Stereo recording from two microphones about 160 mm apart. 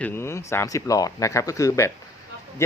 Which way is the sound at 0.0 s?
15° left (ahead or behind).